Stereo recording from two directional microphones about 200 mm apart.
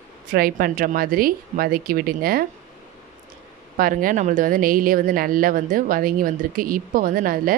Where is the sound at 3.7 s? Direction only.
45° right (ahead or behind).